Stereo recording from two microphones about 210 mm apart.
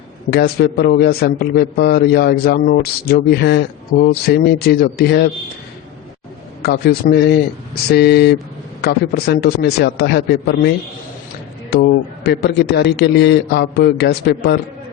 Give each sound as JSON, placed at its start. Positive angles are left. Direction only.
{"t": 0.3, "sound": "a man's voice", "side_deg": 50}
{"t": 6.6, "sound": "a man's voice", "side_deg": 50}
{"t": 11.7, "sound": "a man's voice", "side_deg": 50}